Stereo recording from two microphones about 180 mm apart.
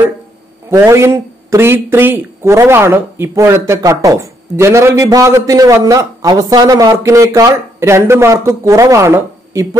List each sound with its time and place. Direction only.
0.7 s speech: 15° right (ahead or behind)